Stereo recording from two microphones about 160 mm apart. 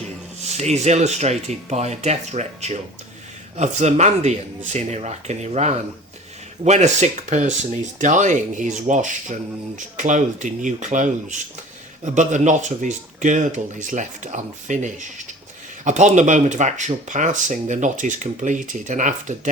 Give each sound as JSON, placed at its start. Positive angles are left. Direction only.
{"t": 0.4, "sound": "speech", "side_deg": -45}